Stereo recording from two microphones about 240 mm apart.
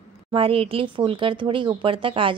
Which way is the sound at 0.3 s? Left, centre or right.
Right.